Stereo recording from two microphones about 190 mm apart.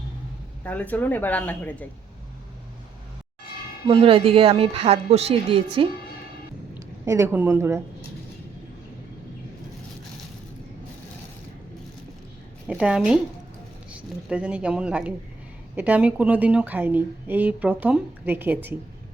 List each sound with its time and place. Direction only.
0.6 s speech: 10° left (ahead or behind)
3.8 s a woman's voice: 30° right (ahead or behind)
7.0 s speech: 15° right (ahead or behind)
12.6 s speech: 5° right (ahead or behind)